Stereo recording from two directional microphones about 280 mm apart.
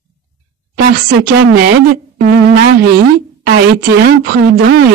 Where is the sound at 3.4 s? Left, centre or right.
Right.